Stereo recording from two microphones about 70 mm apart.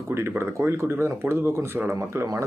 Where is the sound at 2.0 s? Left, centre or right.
Right.